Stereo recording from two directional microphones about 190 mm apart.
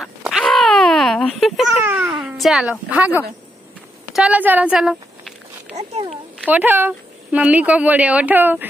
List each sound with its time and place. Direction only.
0.0 s a sound: centre (ahead or behind)
1.9 s baby cry: 10° right (ahead or behind)
4.1 s a woman's voice: 5° right (ahead or behind)
5.7 s a child's voice: 35° right (ahead or behind)
6.4 s speech: 10° right (ahead or behind)